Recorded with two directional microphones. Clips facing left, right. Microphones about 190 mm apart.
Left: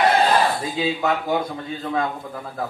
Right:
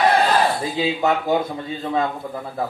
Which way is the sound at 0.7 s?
25° right (ahead or behind).